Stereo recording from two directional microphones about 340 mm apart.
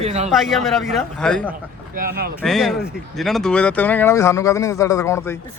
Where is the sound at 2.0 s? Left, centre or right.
Right.